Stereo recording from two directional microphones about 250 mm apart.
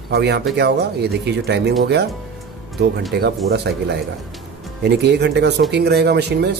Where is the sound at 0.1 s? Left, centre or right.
Right.